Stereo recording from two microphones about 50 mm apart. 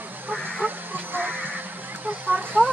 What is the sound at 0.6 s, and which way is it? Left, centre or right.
Music, right.